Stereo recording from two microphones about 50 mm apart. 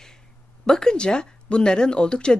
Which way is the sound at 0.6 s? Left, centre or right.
Centre.